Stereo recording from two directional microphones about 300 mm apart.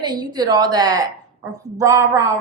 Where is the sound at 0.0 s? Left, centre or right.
Centre.